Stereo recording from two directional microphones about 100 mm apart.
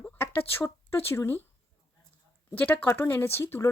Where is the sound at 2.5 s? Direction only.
15° left (ahead or behind).